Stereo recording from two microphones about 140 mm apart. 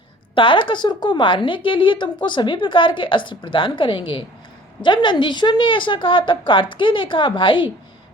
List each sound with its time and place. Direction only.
0.3 s a woman's voice: 35° left (ahead or behind)